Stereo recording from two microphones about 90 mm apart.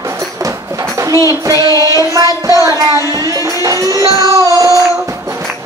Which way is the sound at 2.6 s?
40° right (ahead or behind).